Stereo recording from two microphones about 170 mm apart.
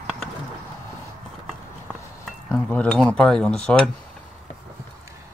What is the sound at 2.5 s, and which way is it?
Speech, 5° left (ahead or behind).